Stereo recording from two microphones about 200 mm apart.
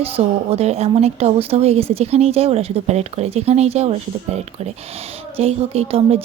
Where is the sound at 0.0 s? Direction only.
30° right (ahead or behind).